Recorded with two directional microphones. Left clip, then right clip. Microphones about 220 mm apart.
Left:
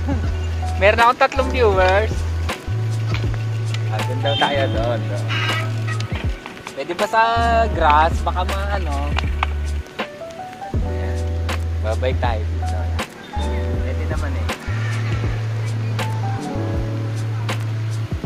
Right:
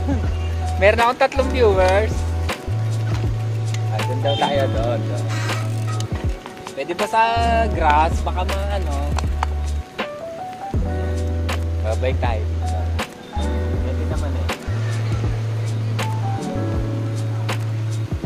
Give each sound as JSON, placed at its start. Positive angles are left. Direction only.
{"t": 0.7, "sound": "speech", "side_deg": -5}
{"t": 3.9, "sound": "speech", "side_deg": 0}
{"t": 6.8, "sound": "music", "side_deg": 5}
{"t": 12.0, "sound": "speech", "side_deg": 20}